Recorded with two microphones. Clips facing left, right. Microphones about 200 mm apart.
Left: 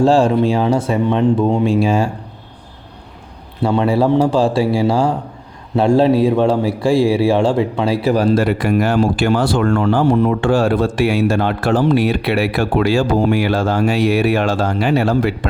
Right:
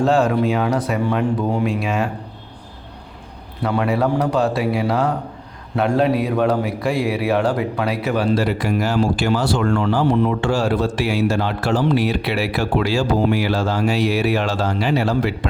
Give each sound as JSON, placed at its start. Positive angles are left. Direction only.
{"t": 0.0, "sound": "speech", "side_deg": 30}
{"t": 3.6, "sound": "a man's voice", "side_deg": 25}